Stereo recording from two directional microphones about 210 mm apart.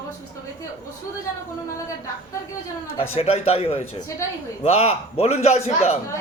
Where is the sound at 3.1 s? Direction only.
30° left (ahead or behind).